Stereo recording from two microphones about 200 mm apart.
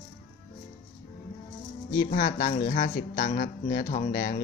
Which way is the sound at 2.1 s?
45° left (ahead or behind).